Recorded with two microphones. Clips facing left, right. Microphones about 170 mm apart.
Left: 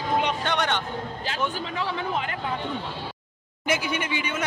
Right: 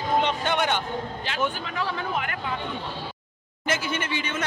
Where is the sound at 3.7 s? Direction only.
15° left (ahead or behind).